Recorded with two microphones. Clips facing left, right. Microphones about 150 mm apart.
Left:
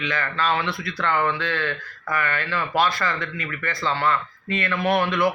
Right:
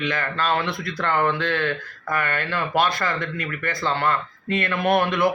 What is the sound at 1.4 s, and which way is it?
Speech, 50° right (ahead or behind).